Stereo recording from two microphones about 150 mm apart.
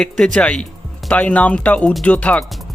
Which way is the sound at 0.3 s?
5° left (ahead or behind).